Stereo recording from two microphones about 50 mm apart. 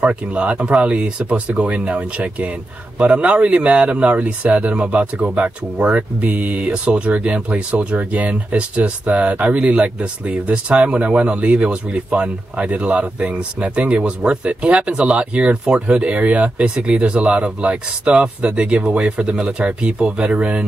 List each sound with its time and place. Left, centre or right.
0.0 s speech: right